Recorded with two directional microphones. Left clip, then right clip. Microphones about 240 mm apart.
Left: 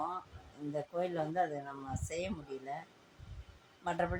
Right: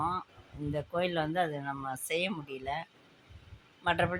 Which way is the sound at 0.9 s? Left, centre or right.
Centre.